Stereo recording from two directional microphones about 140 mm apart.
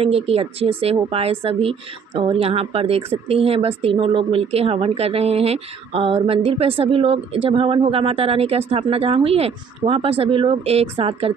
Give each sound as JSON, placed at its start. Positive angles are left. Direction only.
{"t": 0.0, "sound": "speech", "side_deg": -45}